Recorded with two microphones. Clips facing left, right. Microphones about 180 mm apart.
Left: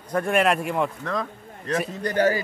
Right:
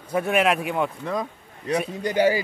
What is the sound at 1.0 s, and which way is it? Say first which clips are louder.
Speech: right 1 dB; 15° right (ahead or behind).